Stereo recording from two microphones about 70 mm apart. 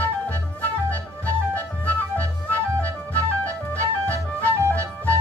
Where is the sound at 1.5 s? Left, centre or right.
Left.